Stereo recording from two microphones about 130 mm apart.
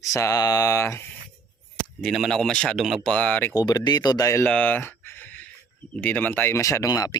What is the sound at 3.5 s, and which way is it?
Speech, 30° left (ahead or behind).